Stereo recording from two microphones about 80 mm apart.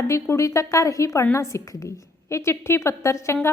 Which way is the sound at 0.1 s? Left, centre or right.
Left.